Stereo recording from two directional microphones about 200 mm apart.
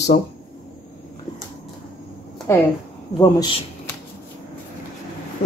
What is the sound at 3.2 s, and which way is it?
Speech, 15° left (ahead or behind).